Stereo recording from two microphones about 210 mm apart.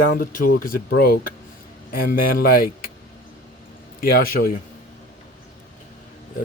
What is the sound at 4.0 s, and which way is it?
Speech, 45° left (ahead or behind).